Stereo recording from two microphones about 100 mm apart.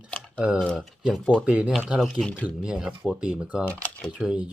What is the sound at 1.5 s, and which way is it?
Speech, 15° right (ahead or behind).